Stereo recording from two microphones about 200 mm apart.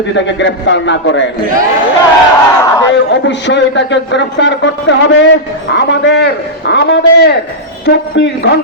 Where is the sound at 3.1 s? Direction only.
65° left (ahead or behind).